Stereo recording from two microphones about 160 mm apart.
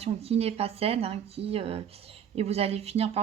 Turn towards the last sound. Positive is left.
turn(degrees=-40)  # may be behind; listen again after turning